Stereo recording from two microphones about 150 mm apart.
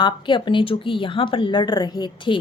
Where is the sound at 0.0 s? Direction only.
30° left (ahead or behind).